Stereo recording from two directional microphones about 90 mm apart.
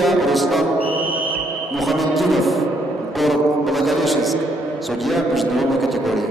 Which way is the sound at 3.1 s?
Centre (ahead or behind).